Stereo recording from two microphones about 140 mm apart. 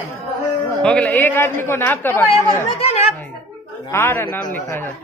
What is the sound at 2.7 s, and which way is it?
Speech, 45° left (ahead or behind).